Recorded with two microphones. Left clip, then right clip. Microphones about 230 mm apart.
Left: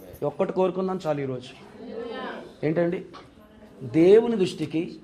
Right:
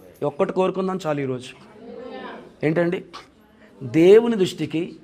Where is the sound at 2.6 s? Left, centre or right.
Right.